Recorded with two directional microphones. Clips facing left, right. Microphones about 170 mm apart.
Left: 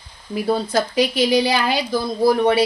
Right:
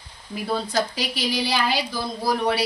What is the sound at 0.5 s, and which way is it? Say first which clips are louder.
A woman's voice: left 4 dB; 50° left (ahead or behind).